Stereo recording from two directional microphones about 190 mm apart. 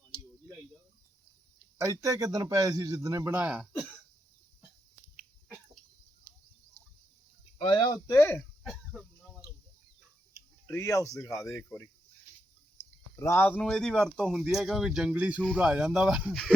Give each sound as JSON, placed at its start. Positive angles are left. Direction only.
{"t": 1.8, "sound": "a man's voice", "side_deg": -15}
{"t": 7.6, "sound": "speech", "side_deg": 25}
{"t": 8.0, "sound": "speech", "side_deg": 15}
{"t": 8.6, "sound": "a sound", "side_deg": 0}
{"t": 10.7, "sound": "speech", "side_deg": 15}
{"t": 13.1, "sound": "speech", "side_deg": 15}